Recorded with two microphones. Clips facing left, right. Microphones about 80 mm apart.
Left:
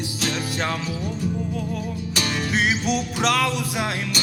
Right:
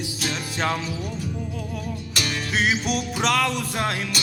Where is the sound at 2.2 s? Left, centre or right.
Centre.